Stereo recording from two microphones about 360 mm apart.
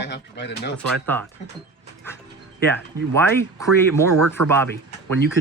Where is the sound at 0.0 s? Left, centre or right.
Left.